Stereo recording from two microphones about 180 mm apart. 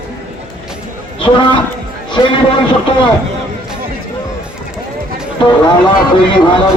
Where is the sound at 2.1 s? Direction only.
25° left (ahead or behind).